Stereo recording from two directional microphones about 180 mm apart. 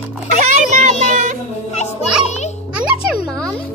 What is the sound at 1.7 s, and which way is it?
Children playing, 40° left (ahead or behind).